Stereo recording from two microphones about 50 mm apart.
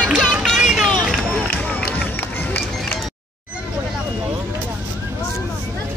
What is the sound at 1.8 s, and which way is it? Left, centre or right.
Run, left.